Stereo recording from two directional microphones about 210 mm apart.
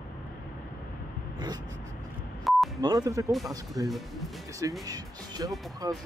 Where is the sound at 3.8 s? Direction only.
15° right (ahead or behind).